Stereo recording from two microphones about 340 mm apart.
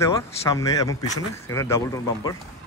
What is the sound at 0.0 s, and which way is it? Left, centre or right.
Speech, centre.